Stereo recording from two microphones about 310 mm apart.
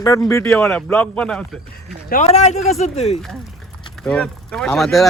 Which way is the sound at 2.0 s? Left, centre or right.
Left.